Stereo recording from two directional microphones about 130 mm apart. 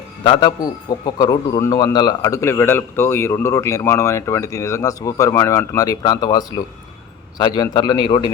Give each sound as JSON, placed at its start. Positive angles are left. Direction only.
{"t": 0.2, "sound": "a man's voice", "side_deg": 35}